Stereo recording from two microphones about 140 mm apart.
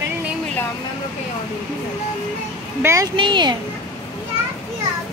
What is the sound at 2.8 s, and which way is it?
Speech, 20° right (ahead or behind).